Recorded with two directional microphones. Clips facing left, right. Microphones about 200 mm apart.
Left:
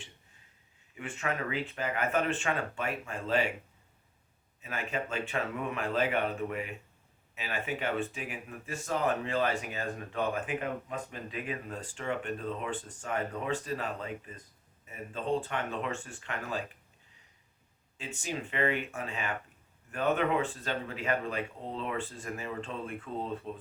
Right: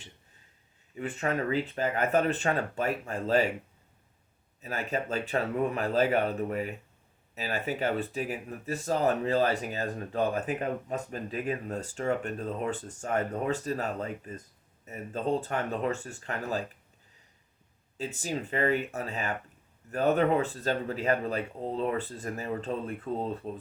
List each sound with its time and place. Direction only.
0.9 s speech: 35° right (ahead or behind)
4.6 s speech: 35° right (ahead or behind)
17.9 s speech: 40° right (ahead or behind)